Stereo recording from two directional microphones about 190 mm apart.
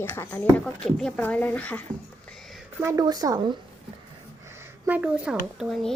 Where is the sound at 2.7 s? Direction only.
15° right (ahead or behind).